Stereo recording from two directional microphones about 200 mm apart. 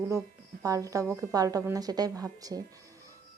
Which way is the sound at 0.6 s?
15° right (ahead or behind).